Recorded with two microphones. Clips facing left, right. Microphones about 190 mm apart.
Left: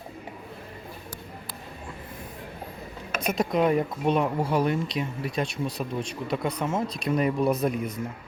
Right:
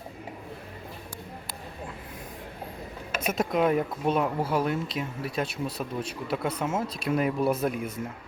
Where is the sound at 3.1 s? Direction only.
5° right (ahead or behind).